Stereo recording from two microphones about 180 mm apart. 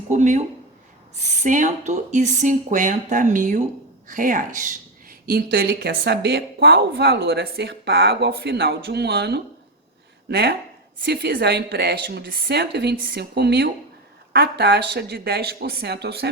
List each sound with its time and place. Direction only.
0.1 s speech: 40° right (ahead or behind); by 16.3 s 65° right (ahead or behind)